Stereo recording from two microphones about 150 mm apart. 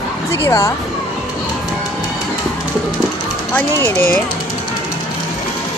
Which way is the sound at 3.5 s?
10° left (ahead or behind).